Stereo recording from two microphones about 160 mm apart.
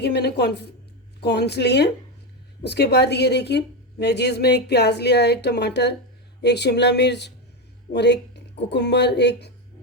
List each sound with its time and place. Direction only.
0.0 s a woman's voice: 90° left